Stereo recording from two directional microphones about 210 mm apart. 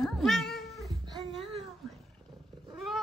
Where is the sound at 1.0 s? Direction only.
20° right (ahead or behind).